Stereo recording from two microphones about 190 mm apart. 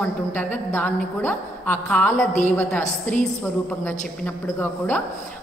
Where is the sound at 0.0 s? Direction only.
10° left (ahead or behind).